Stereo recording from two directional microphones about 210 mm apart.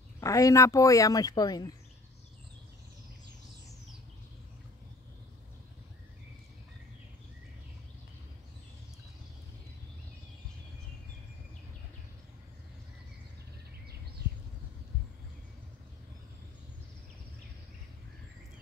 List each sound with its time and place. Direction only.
0.2 s speech: 15° left (ahead or behind)